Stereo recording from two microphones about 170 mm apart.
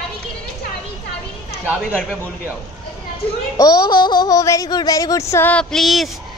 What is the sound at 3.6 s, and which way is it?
Speech, 25° left (ahead or behind).